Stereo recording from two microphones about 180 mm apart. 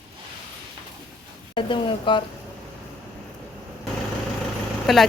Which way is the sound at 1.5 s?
30° left (ahead or behind).